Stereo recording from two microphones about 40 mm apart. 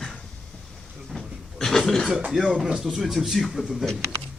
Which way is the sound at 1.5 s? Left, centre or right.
Centre.